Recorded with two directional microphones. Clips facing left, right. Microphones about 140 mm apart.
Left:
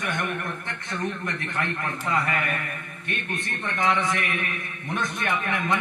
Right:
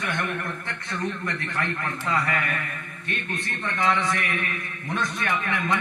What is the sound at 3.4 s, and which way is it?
A man's voice, 20° left (ahead or behind).